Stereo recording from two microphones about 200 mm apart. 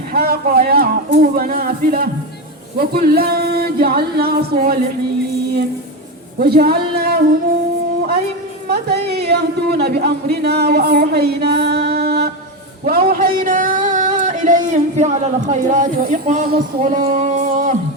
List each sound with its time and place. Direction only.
0.1 s singing: 50° right (ahead or behind)
6.4 s singing: 50° right (ahead or behind)
8.7 s speech: 55° right (ahead or behind)
13.1 s a sound: 45° right (ahead or behind)